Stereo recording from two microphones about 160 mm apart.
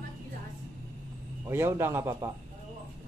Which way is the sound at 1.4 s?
15° right (ahead or behind).